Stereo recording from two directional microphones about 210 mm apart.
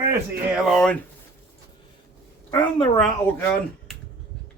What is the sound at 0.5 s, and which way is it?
Speech, centre (ahead or behind).